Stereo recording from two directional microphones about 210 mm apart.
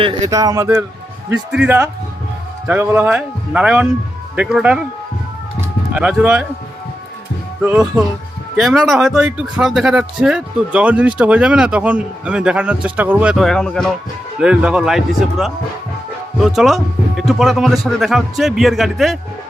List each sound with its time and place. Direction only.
0.0 s speech: 20° right (ahead or behind); by 4.8 s 5° right (ahead or behind)
5.5 s music: 5° right (ahead or behind)
7.6 s speech: 5° right (ahead or behind)